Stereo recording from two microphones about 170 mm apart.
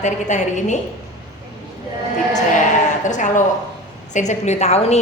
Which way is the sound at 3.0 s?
45° left (ahead or behind).